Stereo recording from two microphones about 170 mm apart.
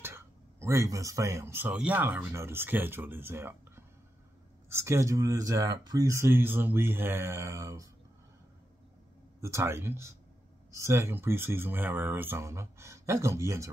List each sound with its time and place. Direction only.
0.0 s speech: 15° right (ahead or behind)
9.4 s speech: 15° right (ahead or behind)